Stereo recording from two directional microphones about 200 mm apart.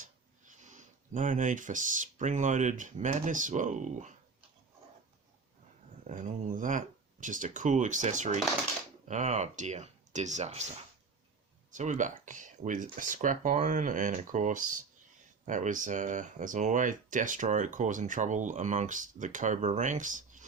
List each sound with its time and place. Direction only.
0.0 s speech: 40° right (ahead or behind)
6.1 s speech: 40° right (ahead or behind)
11.7 s speech: 40° right (ahead or behind)